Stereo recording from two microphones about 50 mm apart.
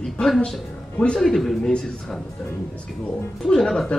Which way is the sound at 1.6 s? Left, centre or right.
Centre.